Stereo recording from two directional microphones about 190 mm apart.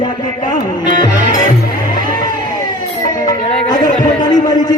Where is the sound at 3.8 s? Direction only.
40° left (ahead or behind).